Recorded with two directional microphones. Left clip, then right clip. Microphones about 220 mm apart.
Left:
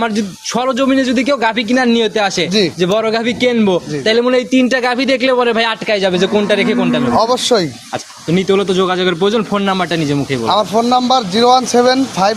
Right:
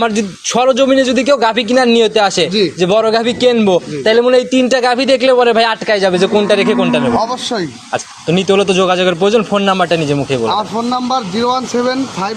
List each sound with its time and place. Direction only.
0.0 s a man's voice: centre (ahead or behind)
7.2 s speech: 55° left (ahead or behind)
8.3 s a man's voice: 5° right (ahead or behind)
10.5 s speech: 55° left (ahead or behind)